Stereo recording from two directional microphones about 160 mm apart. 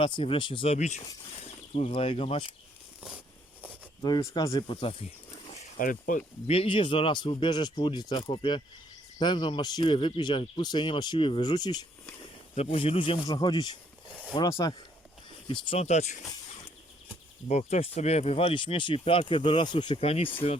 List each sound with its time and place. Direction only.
0.0 s speech: 35° left (ahead or behind)
4.0 s speech: 25° left (ahead or behind)
5.5 s a sound: 55° left (ahead or behind)
6.5 s speech: 35° left (ahead or behind)
12.5 s speech: 35° left (ahead or behind)
17.5 s speech: 45° left (ahead or behind)